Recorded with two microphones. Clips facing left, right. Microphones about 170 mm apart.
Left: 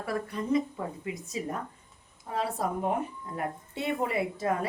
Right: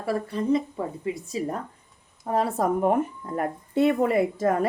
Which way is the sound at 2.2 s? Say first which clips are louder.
Right 7 dB; 45° right (ahead or behind).